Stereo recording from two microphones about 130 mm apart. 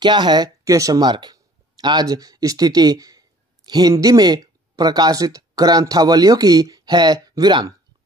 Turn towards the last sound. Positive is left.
turn(degrees=-30)  # may be behind; listen again after turning